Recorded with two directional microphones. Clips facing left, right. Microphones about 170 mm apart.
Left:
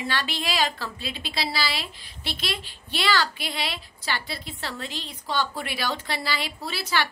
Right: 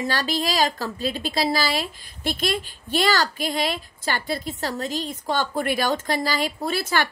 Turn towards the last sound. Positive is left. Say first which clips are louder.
# right 4 dB
turn(degrees=-50)  # may be behind; listen again after turning